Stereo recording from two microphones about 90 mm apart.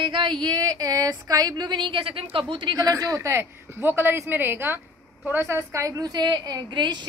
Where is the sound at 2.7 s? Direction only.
35° right (ahead or behind); by 7.0 s 55° right (ahead or behind).